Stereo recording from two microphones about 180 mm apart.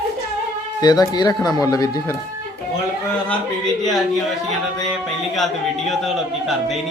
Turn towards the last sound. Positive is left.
turn(degrees=0)  # may be behind; listen again after turning